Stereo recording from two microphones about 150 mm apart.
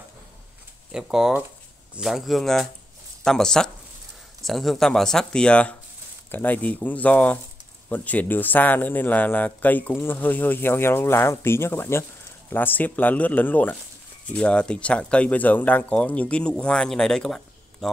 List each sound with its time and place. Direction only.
0.9 s speech: 5° right (ahead or behind)